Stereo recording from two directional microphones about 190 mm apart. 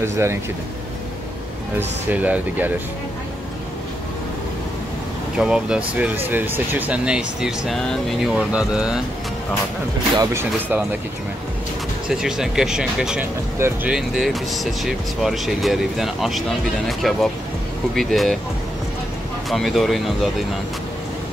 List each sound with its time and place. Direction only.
0.0 s speech: 15° right (ahead or behind)
2.0 s speech: 10° right (ahead or behind)
5.4 s speech: 5° right (ahead or behind)
10.1 s speech: 15° right (ahead or behind)
12.1 s speech: 5° right (ahead or behind)
13.9 s speech: centre (ahead or behind)
19.5 s speech: centre (ahead or behind)